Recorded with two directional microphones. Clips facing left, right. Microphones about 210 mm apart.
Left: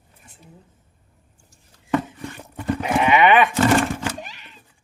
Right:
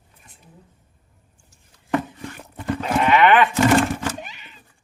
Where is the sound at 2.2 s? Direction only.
15° left (ahead or behind).